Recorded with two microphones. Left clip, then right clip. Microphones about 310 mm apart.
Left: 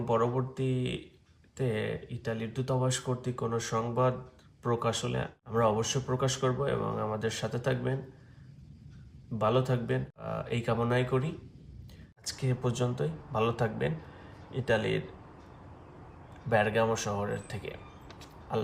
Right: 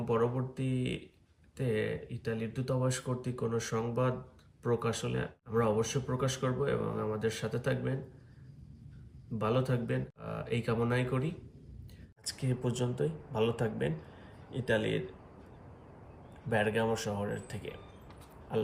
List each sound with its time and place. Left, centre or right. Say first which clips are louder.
0.0 s speech: left 3 dB; centre
9.4 s speech: left 4 dB; centre
16.5 s speech: left 4 dB; centre